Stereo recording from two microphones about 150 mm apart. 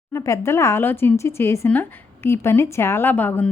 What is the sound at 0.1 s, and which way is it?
Speech, 20° left (ahead or behind).